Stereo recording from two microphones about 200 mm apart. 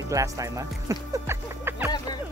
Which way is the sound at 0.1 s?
15° right (ahead or behind).